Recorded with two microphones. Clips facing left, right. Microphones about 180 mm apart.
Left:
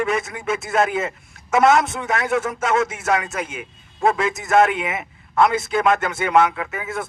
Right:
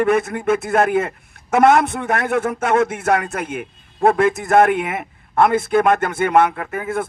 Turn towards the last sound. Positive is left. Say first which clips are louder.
# right 4 dB
turn(degrees=-55)  # may be behind; listen again after turning